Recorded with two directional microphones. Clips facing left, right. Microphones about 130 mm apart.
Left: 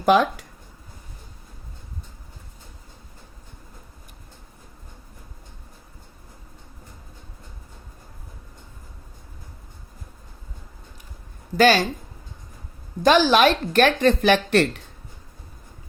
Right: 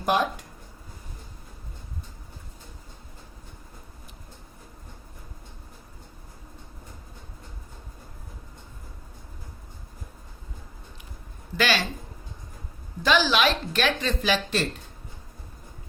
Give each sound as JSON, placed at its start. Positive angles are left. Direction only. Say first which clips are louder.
{"t": 0.1, "sound": "speech", "louder": "left 5 dB", "side_deg": 90}
{"t": 11.5, "sound": "speech", "louder": "left 8 dB", "side_deg": 40}
{"t": 13.0, "sound": "speech", "louder": "left 6 dB", "side_deg": 45}